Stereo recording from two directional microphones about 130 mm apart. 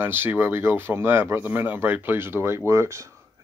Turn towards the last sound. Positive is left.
turn(degrees=-20)  # may be behind; listen again after turning